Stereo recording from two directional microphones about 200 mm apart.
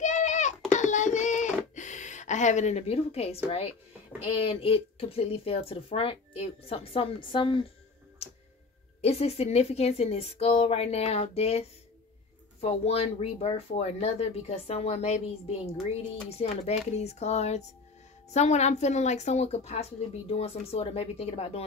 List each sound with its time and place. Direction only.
0.0 s a sound: 35° left (ahead or behind)
3.4 s speech: 30° left (ahead or behind)
9.0 s speech: 30° left (ahead or behind)